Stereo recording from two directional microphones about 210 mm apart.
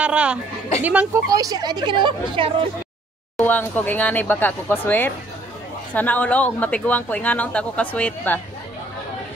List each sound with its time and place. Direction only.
0.0 s a woman's voice: 5° right (ahead or behind); by 2.5 s 25° right (ahead or behind)
3.3 s speech: 10° left (ahead or behind)